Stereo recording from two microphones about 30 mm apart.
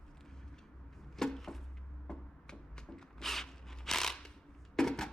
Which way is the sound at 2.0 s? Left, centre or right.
Left.